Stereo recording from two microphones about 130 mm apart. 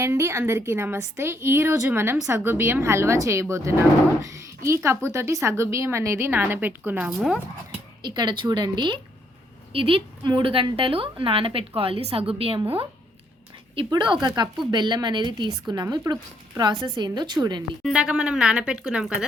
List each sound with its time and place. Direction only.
0.0 s a woman's voice: 20° right (ahead or behind)
7.1 s speech: 5° right (ahead or behind)
8.0 s a woman's voice: 35° right (ahead or behind)
13.9 s a woman's voice: 35° right (ahead or behind)
17.8 s a woman's voice: 5° right (ahead or behind)